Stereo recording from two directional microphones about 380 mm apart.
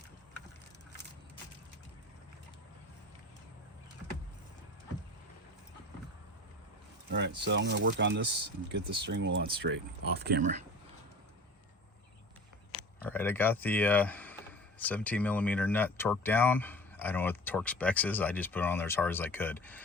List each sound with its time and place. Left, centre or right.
7.1 s speech: right
13.1 s speech: centre